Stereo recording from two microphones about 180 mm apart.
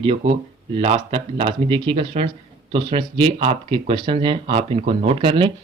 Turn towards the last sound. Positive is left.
turn(degrees=-30)  # may be behind; listen again after turning